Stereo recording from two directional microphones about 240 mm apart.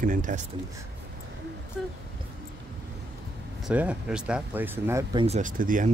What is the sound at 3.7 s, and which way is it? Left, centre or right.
Speech, centre.